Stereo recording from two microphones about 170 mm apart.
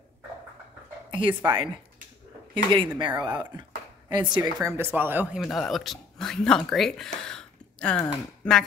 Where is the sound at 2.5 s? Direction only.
30° right (ahead or behind).